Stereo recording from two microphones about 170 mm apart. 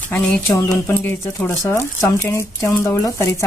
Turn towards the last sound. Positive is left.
turn(degrees=15)  # may be behind; listen again after turning